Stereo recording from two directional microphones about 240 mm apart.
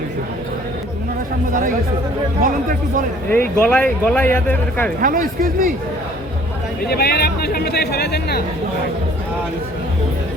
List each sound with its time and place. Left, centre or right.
3.2 s speech: centre
4.9 s speech: right
6.8 s speech: left